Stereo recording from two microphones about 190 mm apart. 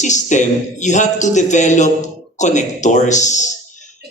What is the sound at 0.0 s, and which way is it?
A man's voice, 40° left (ahead or behind).